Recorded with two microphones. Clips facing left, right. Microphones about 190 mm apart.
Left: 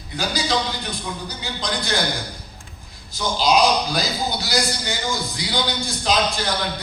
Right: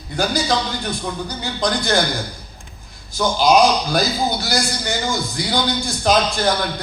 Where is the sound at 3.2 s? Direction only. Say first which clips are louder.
Right 4 dB; 50° right (ahead or behind).